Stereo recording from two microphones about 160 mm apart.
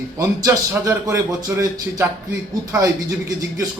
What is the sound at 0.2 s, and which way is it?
Speech, 20° right (ahead or behind).